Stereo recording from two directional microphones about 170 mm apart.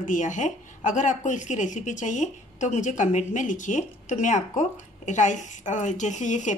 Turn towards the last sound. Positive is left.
turn(degrees=45)  # may be behind; listen again after turning